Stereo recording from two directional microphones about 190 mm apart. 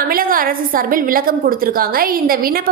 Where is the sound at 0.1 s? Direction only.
50° right (ahead or behind).